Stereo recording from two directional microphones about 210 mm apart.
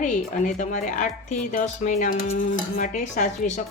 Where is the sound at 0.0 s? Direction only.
35° left (ahead or behind).